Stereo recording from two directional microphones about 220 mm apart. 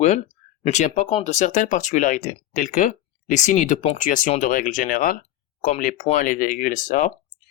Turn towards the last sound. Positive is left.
turn(degrees=35)  # may be behind; listen again after turning